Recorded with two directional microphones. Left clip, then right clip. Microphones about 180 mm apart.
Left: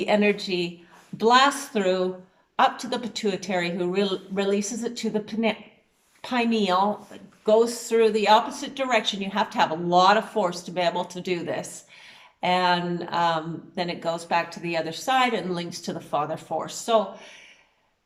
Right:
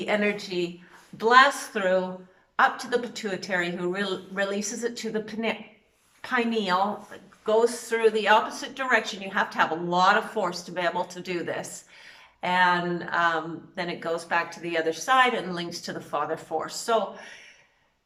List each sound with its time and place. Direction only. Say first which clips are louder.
0.0 s a woman's voice: left 4 dB; 20° left (ahead or behind)